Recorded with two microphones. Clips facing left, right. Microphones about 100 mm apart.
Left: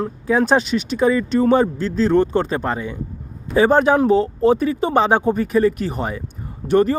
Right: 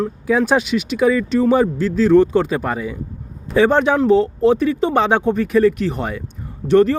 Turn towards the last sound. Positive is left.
turn(degrees=5)  # may be behind; listen again after turning